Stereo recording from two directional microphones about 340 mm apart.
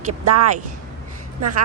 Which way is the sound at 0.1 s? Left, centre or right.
Right.